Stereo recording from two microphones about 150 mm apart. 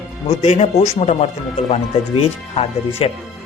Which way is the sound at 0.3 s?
45° left (ahead or behind).